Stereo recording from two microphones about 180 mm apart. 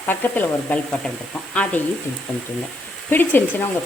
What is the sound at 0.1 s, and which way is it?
Speech, 10° left (ahead or behind).